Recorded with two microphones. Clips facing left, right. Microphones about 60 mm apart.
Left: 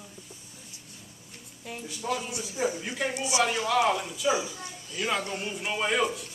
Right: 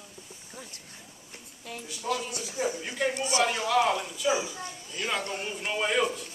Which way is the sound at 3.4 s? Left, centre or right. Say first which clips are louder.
Even; centre.